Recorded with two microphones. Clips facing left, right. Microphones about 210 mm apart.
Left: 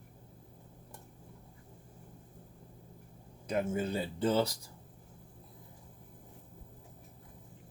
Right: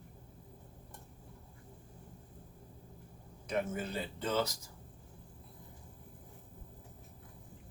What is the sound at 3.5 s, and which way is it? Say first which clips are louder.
Speech: left 3 dB; 30° left (ahead or behind).